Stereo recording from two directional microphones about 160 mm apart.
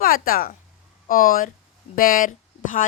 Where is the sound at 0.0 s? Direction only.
65° left (ahead or behind).